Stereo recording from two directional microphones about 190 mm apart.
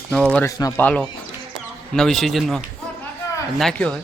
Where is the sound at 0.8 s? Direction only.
5° left (ahead or behind).